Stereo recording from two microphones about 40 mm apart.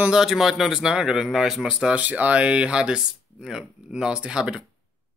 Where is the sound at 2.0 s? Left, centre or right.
Right.